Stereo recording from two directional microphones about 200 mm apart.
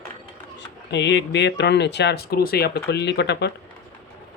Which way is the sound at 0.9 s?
60° left (ahead or behind).